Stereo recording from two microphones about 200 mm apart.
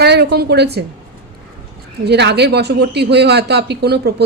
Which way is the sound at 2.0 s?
55° right (ahead or behind).